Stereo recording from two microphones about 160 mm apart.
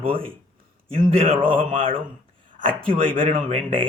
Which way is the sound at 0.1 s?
35° right (ahead or behind).